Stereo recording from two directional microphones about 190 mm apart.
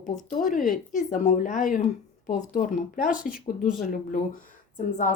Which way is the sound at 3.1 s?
5° right (ahead or behind).